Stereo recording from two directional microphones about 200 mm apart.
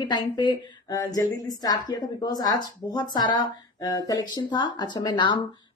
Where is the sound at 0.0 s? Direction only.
20° left (ahead or behind).